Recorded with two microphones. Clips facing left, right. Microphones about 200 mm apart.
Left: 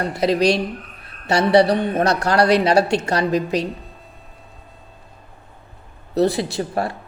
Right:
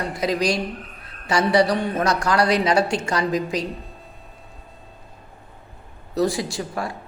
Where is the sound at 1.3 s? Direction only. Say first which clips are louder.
Left 4 dB; 65° left (ahead or behind).